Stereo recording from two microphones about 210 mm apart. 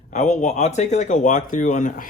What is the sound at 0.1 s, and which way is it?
Speech, 30° left (ahead or behind).